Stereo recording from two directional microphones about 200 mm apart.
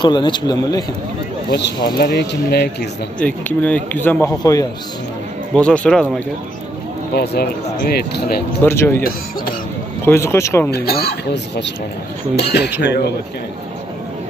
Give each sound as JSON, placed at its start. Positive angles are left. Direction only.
{"t": 0.0, "sound": "speech", "side_deg": 20}
{"t": 2.0, "sound": "speech", "side_deg": 55}
{"t": 3.2, "sound": "speech", "side_deg": 5}
{"t": 5.5, "sound": "speech", "side_deg": 5}
{"t": 7.2, "sound": "speech", "side_deg": 50}
{"t": 8.6, "sound": "speech", "side_deg": 10}
{"t": 10.0, "sound": "speech", "side_deg": 10}
{"t": 10.7, "sound": "speech", "side_deg": 50}